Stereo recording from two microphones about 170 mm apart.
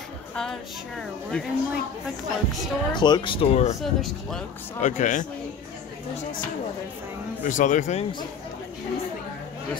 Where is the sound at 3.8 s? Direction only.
Centre (ahead or behind).